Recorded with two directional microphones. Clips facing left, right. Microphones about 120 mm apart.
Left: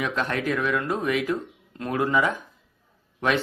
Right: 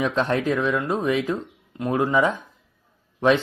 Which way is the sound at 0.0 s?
25° right (ahead or behind).